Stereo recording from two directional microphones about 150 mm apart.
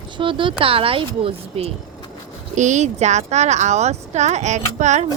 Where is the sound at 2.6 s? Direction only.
50° right (ahead or behind).